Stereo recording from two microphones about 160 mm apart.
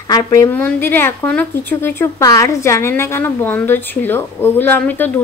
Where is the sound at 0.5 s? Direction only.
10° left (ahead or behind).